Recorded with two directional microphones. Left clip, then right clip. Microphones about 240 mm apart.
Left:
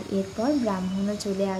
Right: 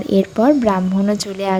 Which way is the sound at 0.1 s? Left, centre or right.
Right.